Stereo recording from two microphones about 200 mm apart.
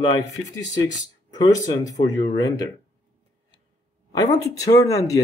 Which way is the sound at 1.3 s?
20° left (ahead or behind).